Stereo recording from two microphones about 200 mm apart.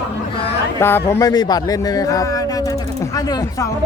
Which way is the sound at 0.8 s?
10° left (ahead or behind).